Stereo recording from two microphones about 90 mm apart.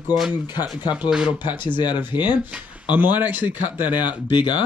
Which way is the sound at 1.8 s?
55° left (ahead or behind).